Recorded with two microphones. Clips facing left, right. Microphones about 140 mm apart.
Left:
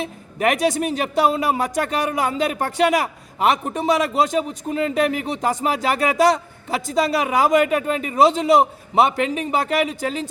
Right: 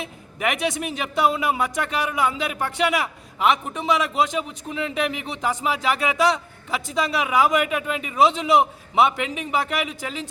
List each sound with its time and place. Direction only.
0.0 s a man's voice: 40° left (ahead or behind)